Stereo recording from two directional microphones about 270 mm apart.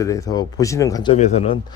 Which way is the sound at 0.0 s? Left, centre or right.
Centre.